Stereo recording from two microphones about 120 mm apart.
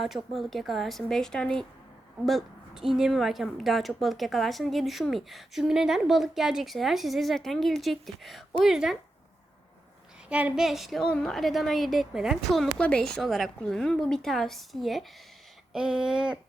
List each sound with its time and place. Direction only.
0.0 s a woman's voice: centre (ahead or behind)
10.2 s a woman's voice: 10° right (ahead or behind)